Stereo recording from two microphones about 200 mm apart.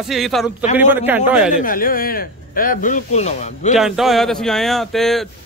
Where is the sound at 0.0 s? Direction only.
Centre (ahead or behind).